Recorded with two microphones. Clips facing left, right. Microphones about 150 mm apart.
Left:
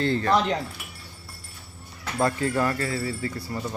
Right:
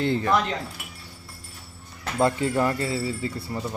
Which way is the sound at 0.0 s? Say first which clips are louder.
Even; 15° right (ahead or behind).